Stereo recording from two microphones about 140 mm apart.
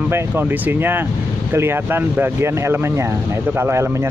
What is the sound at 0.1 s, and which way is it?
Speech, 15° right (ahead or behind).